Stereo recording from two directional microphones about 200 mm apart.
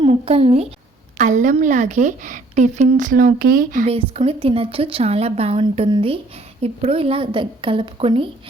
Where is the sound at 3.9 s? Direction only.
30° right (ahead or behind).